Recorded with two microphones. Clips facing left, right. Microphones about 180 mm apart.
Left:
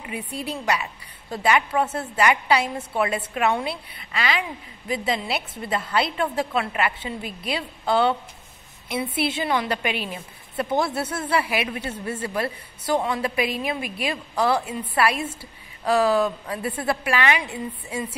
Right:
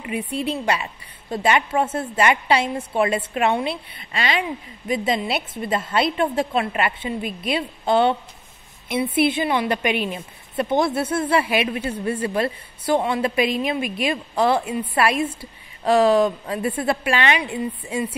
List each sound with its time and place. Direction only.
0.4 s a woman's voice: 25° right (ahead or behind)